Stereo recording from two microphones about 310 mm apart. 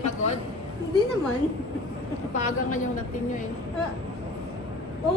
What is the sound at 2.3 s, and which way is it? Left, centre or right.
Speech, left.